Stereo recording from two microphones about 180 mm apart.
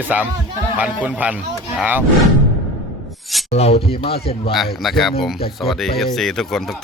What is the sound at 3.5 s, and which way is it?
Speech, 35° left (ahead or behind).